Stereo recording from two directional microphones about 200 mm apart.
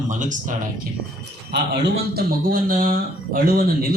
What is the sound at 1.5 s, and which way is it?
Speech, 55° right (ahead or behind).